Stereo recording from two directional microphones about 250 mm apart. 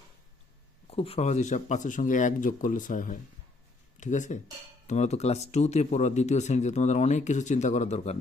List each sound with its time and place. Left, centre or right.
0.9 s speech: left